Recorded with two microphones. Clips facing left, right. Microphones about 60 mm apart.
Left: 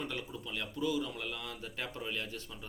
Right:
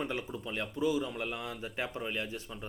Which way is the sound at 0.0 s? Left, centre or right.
Right.